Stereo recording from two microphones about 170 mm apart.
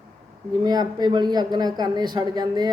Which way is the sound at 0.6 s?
25° right (ahead or behind).